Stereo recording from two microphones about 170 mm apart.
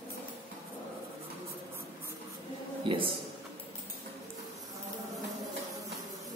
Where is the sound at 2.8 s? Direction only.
30° right (ahead or behind).